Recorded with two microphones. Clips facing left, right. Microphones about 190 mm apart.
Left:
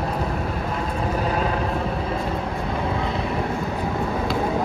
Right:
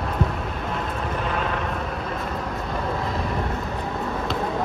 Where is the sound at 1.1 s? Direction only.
40° left (ahead or behind).